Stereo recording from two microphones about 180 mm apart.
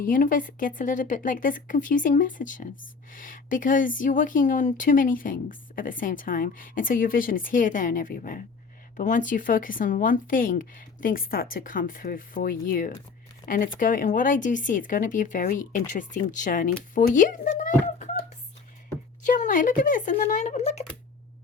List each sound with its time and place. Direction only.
0.0 s a child's voice: 50° left (ahead or behind)
19.2 s speech: 45° left (ahead or behind)